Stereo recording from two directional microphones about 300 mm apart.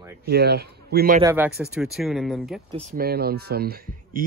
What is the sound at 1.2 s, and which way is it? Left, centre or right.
Speech, centre.